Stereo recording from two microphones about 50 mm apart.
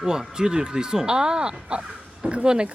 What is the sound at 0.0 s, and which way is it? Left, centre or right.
Speech, centre.